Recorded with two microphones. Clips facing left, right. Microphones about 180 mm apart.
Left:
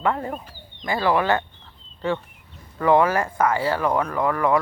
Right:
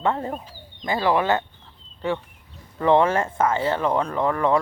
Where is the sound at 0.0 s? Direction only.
25° right (ahead or behind).